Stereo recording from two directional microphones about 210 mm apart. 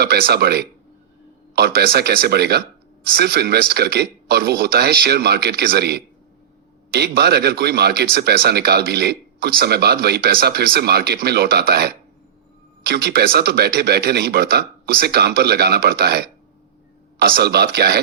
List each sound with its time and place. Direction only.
0.0 s speech: 50° right (ahead or behind)